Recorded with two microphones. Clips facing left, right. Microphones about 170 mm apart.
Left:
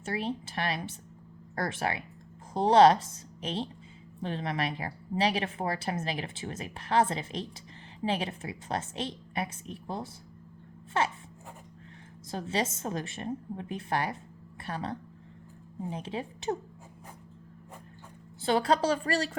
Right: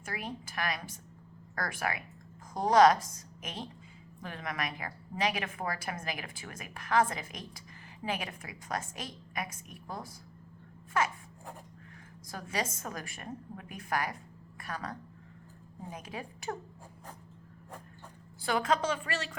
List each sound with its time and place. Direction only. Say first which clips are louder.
0.0 s a woman's voice: left 7 dB; 30° left (ahead or behind)
12.3 s a woman's voice: left 5 dB; 25° left (ahead or behind)
18.4 s a woman's voice: left 4 dB; 30° left (ahead or behind)